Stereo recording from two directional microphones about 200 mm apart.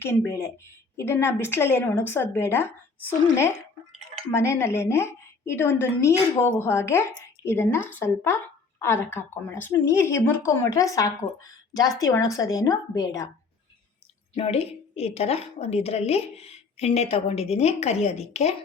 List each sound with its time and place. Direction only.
0.0 s a woman's voice: 10° left (ahead or behind)
4.3 s a woman's voice: 15° left (ahead or behind)
14.3 s a woman's voice: 30° left (ahead or behind)